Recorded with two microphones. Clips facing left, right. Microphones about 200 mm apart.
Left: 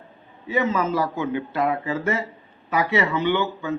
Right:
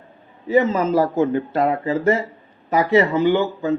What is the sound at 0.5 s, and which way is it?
Speech, 35° right (ahead or behind).